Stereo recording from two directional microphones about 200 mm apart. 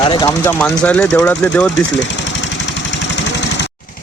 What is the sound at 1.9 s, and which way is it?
Vehicle, 65° left (ahead or behind).